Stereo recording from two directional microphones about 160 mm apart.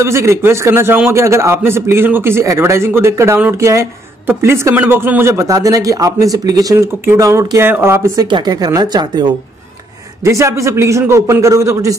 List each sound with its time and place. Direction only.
0.0 s a man's voice: 15° right (ahead or behind)